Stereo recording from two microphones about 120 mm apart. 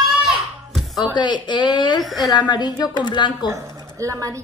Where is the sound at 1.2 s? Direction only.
40° left (ahead or behind).